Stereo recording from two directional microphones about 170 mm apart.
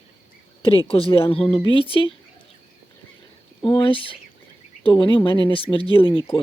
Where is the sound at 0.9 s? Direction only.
35° left (ahead or behind).